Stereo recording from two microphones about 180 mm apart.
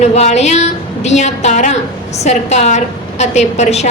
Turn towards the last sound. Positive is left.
turn(degrees=40)  # may be behind; listen again after turning